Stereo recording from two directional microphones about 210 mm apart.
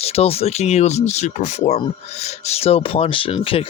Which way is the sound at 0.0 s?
30° left (ahead or behind).